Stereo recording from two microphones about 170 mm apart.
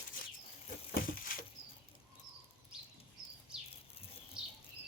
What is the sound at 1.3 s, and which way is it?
Patter, 55° left (ahead or behind).